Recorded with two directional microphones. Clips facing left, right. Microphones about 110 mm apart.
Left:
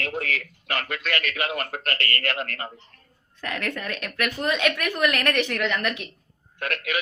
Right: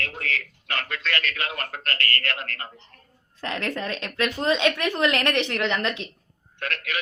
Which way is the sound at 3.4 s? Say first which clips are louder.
Right 1 dB; 25° right (ahead or behind).